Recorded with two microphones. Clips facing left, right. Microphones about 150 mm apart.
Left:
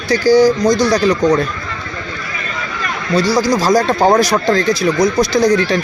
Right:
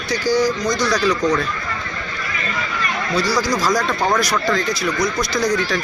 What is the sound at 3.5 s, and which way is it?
Speech, 30° left (ahead or behind).